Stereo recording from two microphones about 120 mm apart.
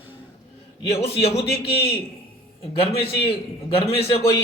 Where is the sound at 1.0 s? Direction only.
55° left (ahead or behind).